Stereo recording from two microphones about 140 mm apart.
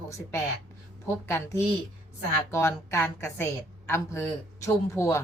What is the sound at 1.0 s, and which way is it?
A woman's voice, 20° left (ahead or behind).